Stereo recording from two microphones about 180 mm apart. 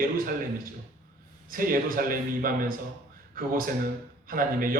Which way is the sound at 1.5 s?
50° right (ahead or behind).